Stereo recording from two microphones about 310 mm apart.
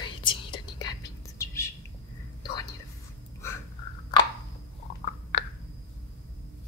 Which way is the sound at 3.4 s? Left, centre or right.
Centre.